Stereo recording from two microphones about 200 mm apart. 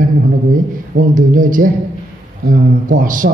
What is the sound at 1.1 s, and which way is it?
Speech, 40° right (ahead or behind).